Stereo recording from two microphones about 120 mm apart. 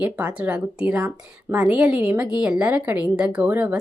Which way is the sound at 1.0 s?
20° right (ahead or behind).